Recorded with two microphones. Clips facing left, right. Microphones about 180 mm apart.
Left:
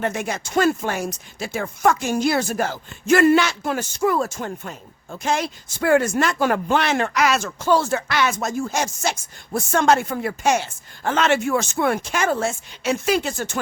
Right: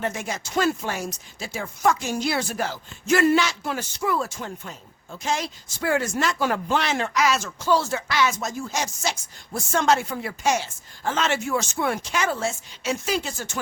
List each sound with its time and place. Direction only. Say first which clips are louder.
0.0 s speech: left 4 dB; 60° left (ahead or behind)